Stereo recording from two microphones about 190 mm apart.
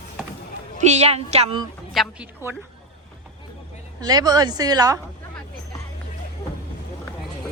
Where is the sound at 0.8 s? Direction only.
35° right (ahead or behind).